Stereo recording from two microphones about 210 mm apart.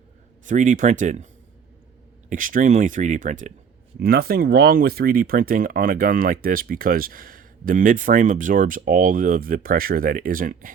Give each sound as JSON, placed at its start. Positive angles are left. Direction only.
{"t": 0.4, "sound": "speech", "side_deg": -35}
{"t": 2.3, "sound": "speech", "side_deg": -40}
{"t": 4.0, "sound": "speech", "side_deg": -45}